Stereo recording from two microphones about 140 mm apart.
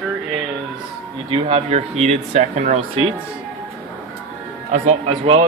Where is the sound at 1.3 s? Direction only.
40° right (ahead or behind); by 2.8 s 60° right (ahead or behind).